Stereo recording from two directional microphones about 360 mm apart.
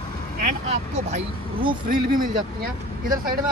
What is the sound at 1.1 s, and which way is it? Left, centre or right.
Speech, right.